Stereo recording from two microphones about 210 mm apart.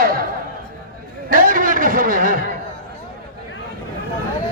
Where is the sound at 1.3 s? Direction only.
40° right (ahead or behind).